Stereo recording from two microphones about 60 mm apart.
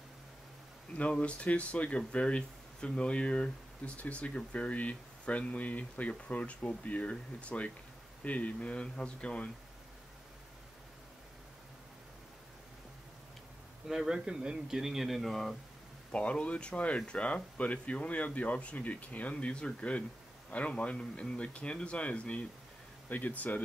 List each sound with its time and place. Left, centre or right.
0.9 s speech: centre
13.8 s speech: centre
16.1 s speech: centre